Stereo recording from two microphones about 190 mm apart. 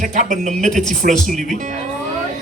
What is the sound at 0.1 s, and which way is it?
Speech, 40° right (ahead or behind).